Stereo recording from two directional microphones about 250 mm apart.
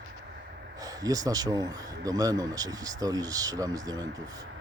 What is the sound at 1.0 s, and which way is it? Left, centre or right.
Speech, centre.